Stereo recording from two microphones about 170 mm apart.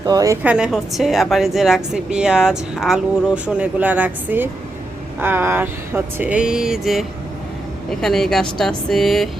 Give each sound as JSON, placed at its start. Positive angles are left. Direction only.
{"t": 0.0, "sound": "a woman's voice", "side_deg": -20}
{"t": 0.4, "sound": "a woman's voice", "side_deg": -5}
{"t": 5.2, "sound": "a sound", "side_deg": -10}
{"t": 7.9, "sound": "a woman's voice", "side_deg": 5}